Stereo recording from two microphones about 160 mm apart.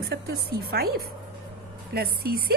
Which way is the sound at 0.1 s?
90° right.